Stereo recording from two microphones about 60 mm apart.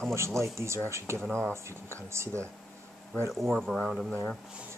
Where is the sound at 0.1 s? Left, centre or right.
Right.